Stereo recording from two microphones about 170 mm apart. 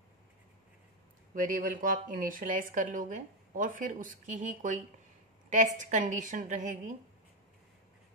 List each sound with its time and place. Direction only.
1.3 s speech: 55° right (ahead or behind)